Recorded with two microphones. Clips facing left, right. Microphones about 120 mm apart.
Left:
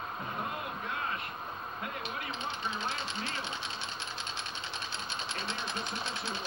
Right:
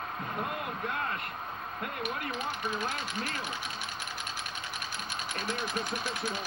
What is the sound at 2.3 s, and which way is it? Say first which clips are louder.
Speech: right 3 dB; 25° left (ahead or behind).